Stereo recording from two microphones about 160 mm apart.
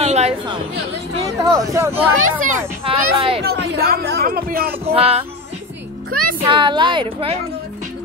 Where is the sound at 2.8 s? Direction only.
35° right (ahead or behind).